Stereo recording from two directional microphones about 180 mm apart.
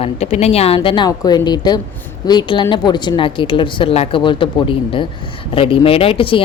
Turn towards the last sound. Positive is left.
turn(degrees=30)  # may be behind; listen again after turning